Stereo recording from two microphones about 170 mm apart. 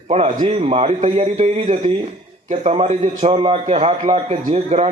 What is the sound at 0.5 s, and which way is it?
A man's voice, 35° right (ahead or behind).